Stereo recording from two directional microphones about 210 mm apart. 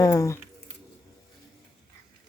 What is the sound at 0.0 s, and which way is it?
Speech, 15° left (ahead or behind).